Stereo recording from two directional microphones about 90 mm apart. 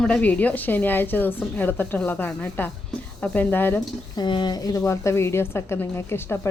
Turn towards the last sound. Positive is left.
turn(degrees=25)  # may be behind; listen again after turning